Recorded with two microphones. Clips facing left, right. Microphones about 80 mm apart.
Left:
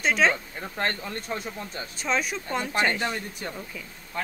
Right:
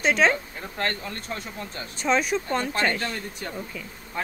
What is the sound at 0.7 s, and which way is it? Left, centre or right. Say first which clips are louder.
Speech: even; left.